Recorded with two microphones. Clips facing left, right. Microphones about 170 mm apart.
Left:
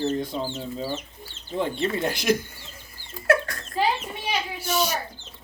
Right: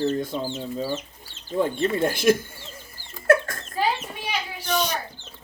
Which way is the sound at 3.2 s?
50° right (ahead or behind).